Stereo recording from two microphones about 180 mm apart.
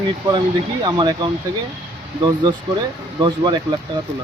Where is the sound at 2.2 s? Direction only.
25° right (ahead or behind).